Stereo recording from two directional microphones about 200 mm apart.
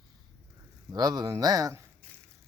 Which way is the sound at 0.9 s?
20° right (ahead or behind).